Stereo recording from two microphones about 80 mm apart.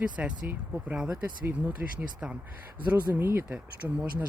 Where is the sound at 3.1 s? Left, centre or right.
Right.